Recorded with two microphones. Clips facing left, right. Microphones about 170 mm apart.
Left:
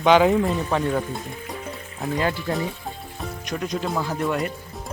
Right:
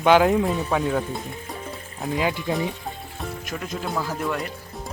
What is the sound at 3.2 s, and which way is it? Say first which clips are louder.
Speech: left 3 dB; 5° right (ahead or behind).